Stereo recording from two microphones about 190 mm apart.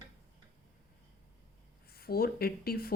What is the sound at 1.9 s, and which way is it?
Speech, 55° left (ahead or behind).